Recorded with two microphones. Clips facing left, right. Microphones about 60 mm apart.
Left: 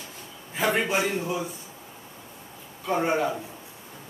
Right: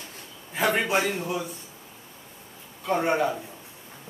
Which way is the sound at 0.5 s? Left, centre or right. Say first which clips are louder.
Right 1 dB; centre.